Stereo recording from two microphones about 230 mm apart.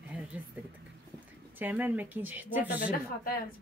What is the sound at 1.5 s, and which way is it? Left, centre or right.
A woman's voice, centre.